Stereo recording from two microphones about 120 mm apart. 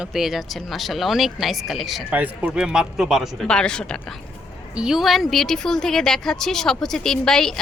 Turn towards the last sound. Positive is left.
turn(degrees=5)  # may be behind; listen again after turning